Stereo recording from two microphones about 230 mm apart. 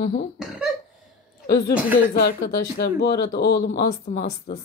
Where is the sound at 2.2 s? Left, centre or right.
Left.